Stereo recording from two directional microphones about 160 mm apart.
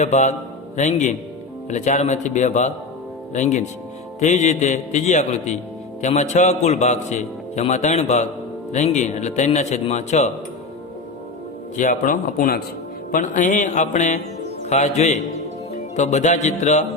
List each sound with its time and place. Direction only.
0.0 s a man's voice: 45° left (ahead or behind)
11.8 s a man's voice: 55° left (ahead or behind)